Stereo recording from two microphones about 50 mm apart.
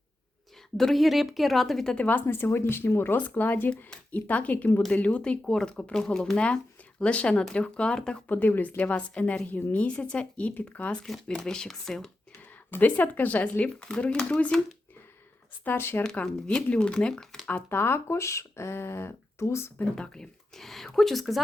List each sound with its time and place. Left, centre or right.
0.8 s speech: centre
2.2 s speech: left
3.2 s a woman's voice: left
8.3 s a woman's voice: left
11.3 s speech: centre
12.7 s a woman's voice: left
15.6 s speech: left
16.2 s speech: centre
17.7 s speech: left
18.2 s speech: left
19.8 s speech: centre